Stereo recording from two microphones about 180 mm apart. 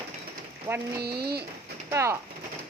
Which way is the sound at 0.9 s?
60° right (ahead or behind).